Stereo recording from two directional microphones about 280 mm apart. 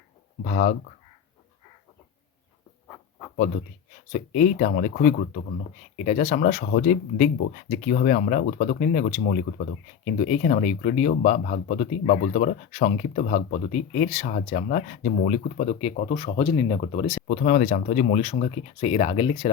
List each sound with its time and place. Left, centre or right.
0.4 s speech: left
4.4 s speech: left